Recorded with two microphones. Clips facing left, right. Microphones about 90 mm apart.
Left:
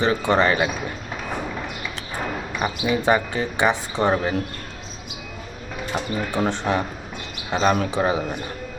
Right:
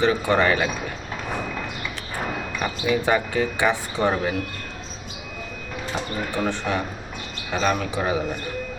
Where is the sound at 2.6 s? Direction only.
20° left (ahead or behind).